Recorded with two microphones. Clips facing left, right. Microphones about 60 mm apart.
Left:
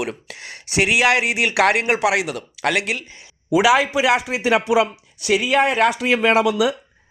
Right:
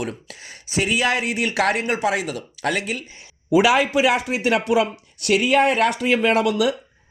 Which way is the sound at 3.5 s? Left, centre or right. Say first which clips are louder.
Left 1 dB; centre.